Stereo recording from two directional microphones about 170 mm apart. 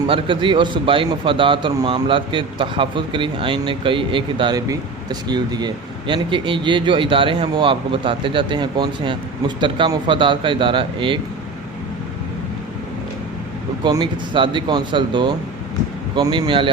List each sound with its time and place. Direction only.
0.0 s speech: 30° right (ahead or behind)
13.8 s speech: 25° right (ahead or behind)